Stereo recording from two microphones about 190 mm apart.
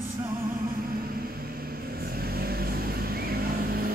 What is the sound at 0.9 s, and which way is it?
Music, 50° right (ahead or behind).